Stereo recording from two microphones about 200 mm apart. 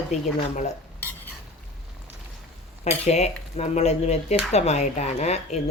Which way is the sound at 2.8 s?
35° left (ahead or behind).